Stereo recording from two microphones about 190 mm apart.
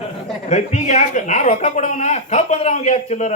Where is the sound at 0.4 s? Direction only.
40° left (ahead or behind).